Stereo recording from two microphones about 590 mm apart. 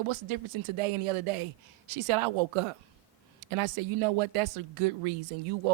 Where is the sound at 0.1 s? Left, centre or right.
Right.